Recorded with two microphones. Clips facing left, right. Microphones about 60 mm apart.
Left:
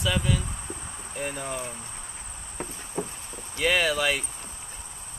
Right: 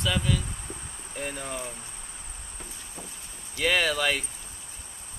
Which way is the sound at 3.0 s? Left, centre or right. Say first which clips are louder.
Left 13 dB; left.